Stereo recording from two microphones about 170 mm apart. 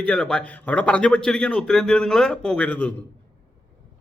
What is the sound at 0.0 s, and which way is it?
A man's voice, 5° left (ahead or behind).